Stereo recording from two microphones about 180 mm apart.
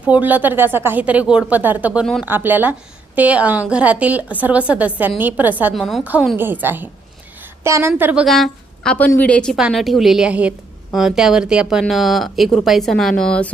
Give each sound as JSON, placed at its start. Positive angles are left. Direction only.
{"t": 0.0, "sound": "a woman's voice", "side_deg": -10}
{"t": 2.0, "sound": "a woman's voice", "side_deg": 0}
{"t": 2.2, "sound": "a woman's voice", "side_deg": -10}